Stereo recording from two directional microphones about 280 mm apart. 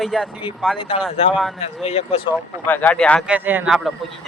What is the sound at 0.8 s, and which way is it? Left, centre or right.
Speech, centre.